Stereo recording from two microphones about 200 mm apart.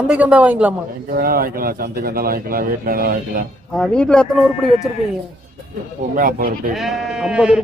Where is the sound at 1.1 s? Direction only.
45° right (ahead or behind).